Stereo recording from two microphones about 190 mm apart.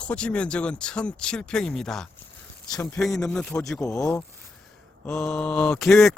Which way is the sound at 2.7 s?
15° left (ahead or behind).